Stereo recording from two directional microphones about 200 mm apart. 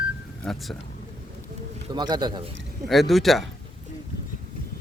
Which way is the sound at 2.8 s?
Centre (ahead or behind).